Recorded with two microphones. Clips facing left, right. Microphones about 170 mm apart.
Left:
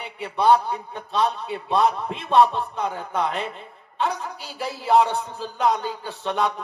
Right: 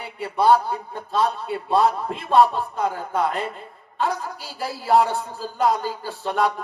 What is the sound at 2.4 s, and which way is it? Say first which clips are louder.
Speech: even; 5° right (ahead or behind).